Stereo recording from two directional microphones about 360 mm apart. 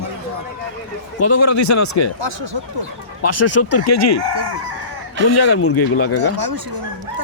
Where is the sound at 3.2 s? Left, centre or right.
Left.